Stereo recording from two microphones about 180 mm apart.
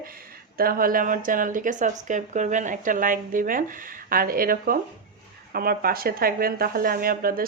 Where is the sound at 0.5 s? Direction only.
55° right (ahead or behind).